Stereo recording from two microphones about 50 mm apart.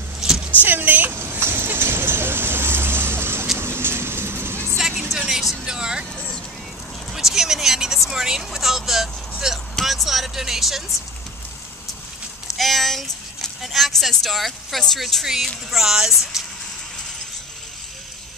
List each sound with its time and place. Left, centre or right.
0.2 s vehicle: centre
0.6 s speech: right
1.4 s vehicle: right
4.7 s music: centre
5.3 s vehicle: centre
5.7 s vehicle: centre
9.8 s a sound: centre
12.4 s a sound: centre
15.0 s speech: centre
15.2 s speech: centre